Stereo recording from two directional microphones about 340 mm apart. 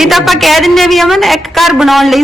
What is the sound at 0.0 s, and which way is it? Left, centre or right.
A woman's voice, centre.